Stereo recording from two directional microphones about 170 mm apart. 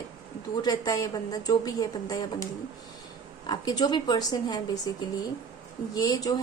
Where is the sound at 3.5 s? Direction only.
25° left (ahead or behind).